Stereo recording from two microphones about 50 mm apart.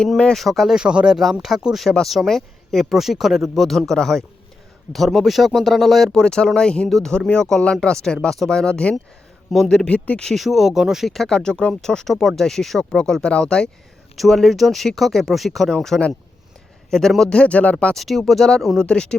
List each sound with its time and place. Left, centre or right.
0.3 s speech: centre
0.8 s speech: centre
1.2 s speech: centre
6.1 s speech: centre
6.8 s speech: centre
7.1 s speech: centre
10.3 s speech: centre
11.1 s speech: centre
14.2 s speech: centre
17.3 s speech: left
17.9 s speech: centre
18.8 s speech: centre